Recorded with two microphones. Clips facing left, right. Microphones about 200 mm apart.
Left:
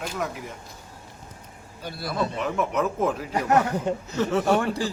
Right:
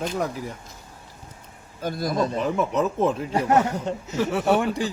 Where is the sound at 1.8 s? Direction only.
45° right (ahead or behind); by 3.6 s 30° right (ahead or behind).